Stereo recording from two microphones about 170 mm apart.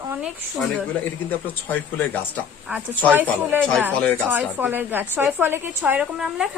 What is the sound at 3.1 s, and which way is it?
Speech, 10° right (ahead or behind).